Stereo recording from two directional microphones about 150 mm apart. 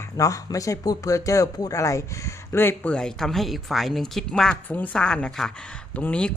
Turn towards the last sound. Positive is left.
turn(degrees=10)  # may be behind; listen again after turning